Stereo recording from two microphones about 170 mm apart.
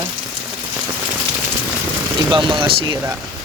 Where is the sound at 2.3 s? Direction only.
30° right (ahead or behind).